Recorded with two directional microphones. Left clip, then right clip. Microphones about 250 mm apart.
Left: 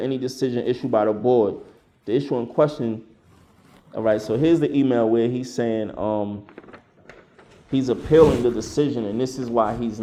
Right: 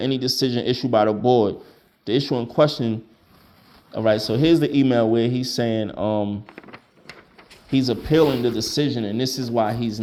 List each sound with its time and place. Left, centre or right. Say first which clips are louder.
0.0 s speech: right 2 dB; right
6.4 s a sound: right 2 dB; right
7.7 s speech: left 1 dB; right